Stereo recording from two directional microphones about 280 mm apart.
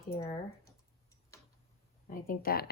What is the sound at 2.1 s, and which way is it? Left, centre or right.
Speech, left.